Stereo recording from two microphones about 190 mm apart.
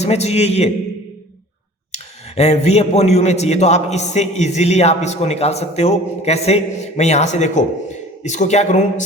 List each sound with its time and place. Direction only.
0.0 s a man's voice: 35° left (ahead or behind)
1.9 s a man's voice: 35° left (ahead or behind)